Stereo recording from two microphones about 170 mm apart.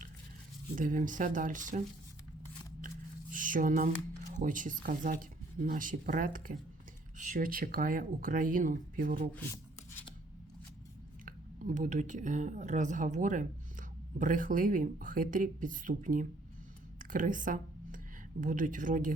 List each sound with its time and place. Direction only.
0.8 s speech: 50° right (ahead or behind)
3.3 s a sound: 50° right (ahead or behind)
4.4 s speech: 50° right (ahead or behind)
11.3 s speech: 50° right (ahead or behind)